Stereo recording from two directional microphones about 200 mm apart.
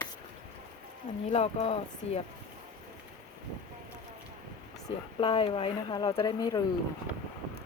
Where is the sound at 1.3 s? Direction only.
30° left (ahead or behind).